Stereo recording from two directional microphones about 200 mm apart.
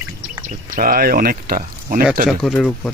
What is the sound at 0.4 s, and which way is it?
Speech, 45° right (ahead or behind).